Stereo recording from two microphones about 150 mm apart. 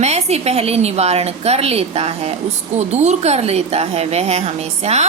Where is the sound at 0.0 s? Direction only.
45° right (ahead or behind).